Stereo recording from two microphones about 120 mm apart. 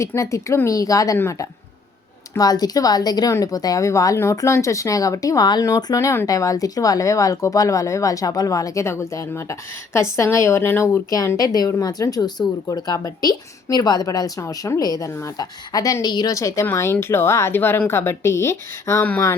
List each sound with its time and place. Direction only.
0.0 s speech: 25° left (ahead or behind)